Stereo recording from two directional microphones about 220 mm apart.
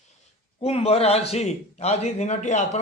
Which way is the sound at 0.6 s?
25° left (ahead or behind).